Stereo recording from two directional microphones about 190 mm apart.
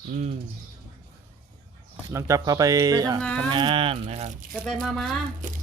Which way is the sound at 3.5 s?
25° right (ahead or behind).